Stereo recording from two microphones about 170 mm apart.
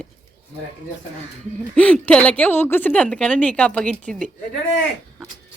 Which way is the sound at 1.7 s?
5° left (ahead or behind).